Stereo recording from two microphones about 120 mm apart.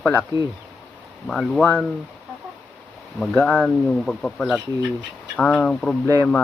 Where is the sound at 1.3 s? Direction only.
5° left (ahead or behind).